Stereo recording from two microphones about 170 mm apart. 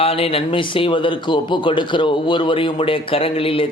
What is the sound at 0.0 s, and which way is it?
A man's voice, 35° left (ahead or behind).